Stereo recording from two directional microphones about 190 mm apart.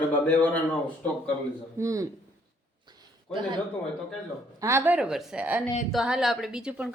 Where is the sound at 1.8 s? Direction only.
15° right (ahead or behind).